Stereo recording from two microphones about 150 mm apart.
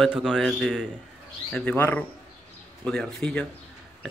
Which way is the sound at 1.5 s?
10° left (ahead or behind).